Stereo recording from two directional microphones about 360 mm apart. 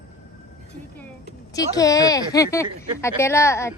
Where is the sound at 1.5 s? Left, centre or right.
Centre.